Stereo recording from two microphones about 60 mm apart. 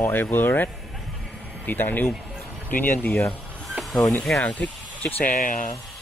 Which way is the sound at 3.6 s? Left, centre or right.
Centre.